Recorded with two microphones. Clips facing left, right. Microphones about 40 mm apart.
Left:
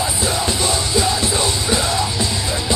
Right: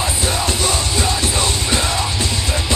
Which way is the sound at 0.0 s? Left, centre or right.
Right.